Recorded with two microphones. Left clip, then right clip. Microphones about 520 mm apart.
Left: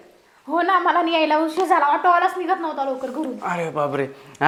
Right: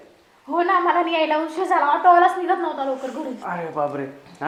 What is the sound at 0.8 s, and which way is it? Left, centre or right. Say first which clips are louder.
Speech: left 1 dB; left.